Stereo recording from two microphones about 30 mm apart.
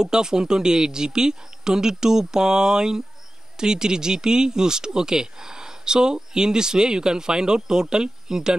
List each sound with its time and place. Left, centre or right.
0.0 s speech: right